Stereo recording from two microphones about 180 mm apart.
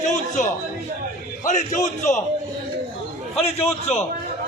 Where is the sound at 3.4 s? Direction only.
35° left (ahead or behind).